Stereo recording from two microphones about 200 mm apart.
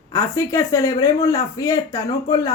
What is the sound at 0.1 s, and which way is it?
Speech, 15° left (ahead or behind).